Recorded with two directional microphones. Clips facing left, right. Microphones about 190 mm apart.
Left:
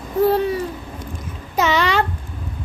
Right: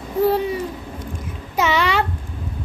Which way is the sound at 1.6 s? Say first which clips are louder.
Left 1 dB; 10° right (ahead or behind).